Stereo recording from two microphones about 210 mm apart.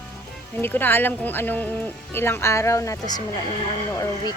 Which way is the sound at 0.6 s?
10° left (ahead or behind).